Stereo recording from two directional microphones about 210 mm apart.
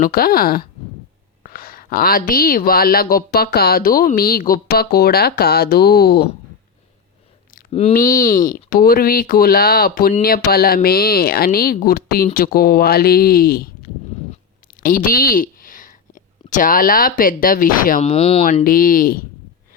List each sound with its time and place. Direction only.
0.0 s speech: 45° left (ahead or behind)
7.7 s speech: 30° left (ahead or behind)
7.9 s speech: 45° left (ahead or behind)
18.1 s speech: 30° left (ahead or behind)
18.4 s speech: 40° left (ahead or behind)